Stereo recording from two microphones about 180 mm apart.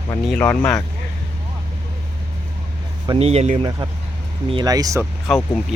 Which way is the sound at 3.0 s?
35° right (ahead or behind).